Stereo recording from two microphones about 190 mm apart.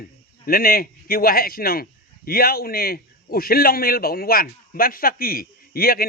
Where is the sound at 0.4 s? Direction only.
50° left (ahead or behind).